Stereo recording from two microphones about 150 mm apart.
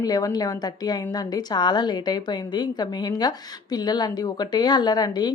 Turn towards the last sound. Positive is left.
turn(degrees=30)  # may be behind; listen again after turning